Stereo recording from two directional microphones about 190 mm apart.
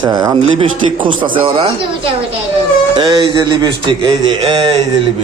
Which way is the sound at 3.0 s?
25° right (ahead or behind).